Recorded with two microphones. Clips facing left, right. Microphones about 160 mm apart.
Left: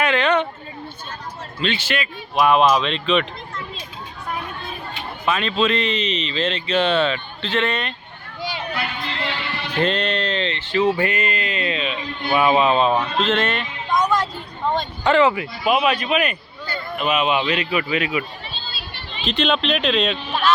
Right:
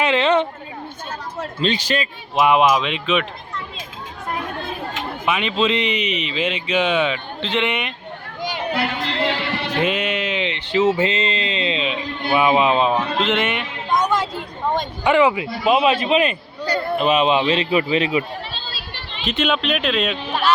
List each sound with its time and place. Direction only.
0.0 s a sound: 25° right (ahead or behind)
1.6 s speech: 35° right (ahead or behind)
2.3 s speech: 20° right (ahead or behind)
5.2 s speech: 15° right (ahead or behind)
8.4 s a sound: 15° right (ahead or behind)
8.7 s music: 70° right (ahead or behind)
9.2 s music: 40° right (ahead or behind)
9.8 s speech: 10° right (ahead or behind)
13.2 s a sound: 15° right (ahead or behind)
15.6 s a man's voice: 25° right (ahead or behind)
19.3 s speech: 5° right (ahead or behind)